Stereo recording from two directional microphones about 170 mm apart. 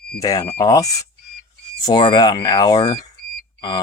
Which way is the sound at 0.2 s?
20° left (ahead or behind).